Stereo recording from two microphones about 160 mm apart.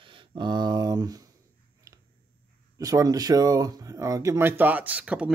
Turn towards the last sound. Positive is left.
turn(degrees=-10)  # may be behind; listen again after turning